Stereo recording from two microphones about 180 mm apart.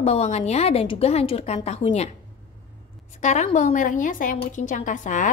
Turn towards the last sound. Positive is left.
turn(degrees=45)  # may be behind; listen again after turning